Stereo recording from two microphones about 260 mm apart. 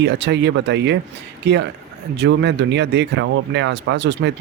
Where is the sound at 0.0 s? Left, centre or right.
Right.